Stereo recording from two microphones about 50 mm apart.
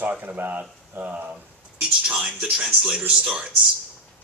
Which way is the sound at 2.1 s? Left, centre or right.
Right.